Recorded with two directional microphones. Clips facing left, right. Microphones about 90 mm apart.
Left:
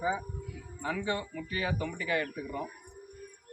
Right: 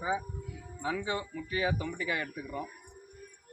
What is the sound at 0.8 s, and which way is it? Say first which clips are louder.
A man's voice: even; 10° right (ahead or behind).